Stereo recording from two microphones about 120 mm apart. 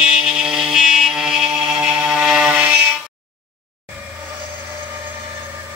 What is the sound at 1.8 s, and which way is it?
Music, 5° right (ahead or behind).